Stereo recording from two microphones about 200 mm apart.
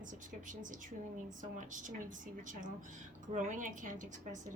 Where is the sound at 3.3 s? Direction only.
40° right (ahead or behind).